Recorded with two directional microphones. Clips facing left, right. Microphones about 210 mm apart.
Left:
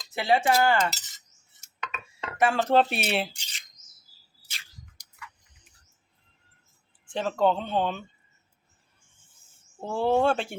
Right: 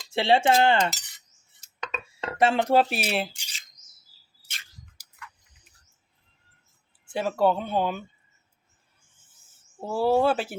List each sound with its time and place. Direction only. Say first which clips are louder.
0.1 s speech: right 3 dB; 25° right (ahead or behind)
1.6 s dishes: right 4 dB; 30° right (ahead or behind)
2.7 s speech: even; centre (ahead or behind)
4.5 s a sound: even; centre (ahead or behind)
7.0 s speech: right 1 dB; 10° right (ahead or behind)
9.8 s speech: right 1 dB; 5° right (ahead or behind)